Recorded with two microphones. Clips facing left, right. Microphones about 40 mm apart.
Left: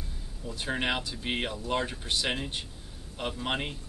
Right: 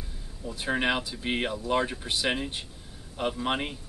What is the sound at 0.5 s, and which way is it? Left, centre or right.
Speech, centre.